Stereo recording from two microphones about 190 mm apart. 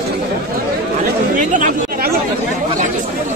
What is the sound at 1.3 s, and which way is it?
Chatter, 45° right (ahead or behind).